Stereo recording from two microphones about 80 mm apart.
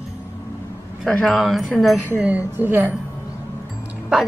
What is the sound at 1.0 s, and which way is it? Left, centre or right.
Speech, centre.